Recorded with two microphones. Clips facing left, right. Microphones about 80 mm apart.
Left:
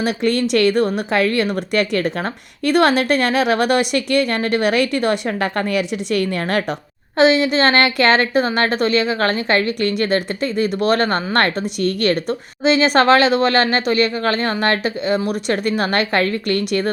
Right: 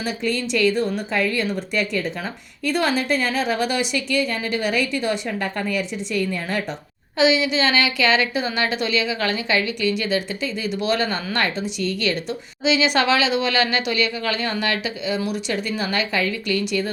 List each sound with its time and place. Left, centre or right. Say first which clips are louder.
0.0 s speech: left 6 dB; left
7.2 s a woman's voice: left 5 dB; left